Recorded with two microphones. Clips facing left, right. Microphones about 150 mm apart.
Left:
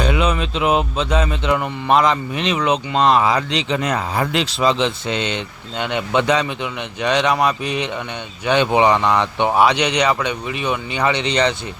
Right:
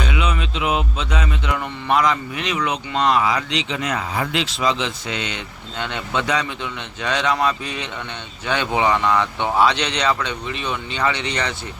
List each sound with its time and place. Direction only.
0.0 s speech: 40° left (ahead or behind)
5.7 s speech: 15° left (ahead or behind)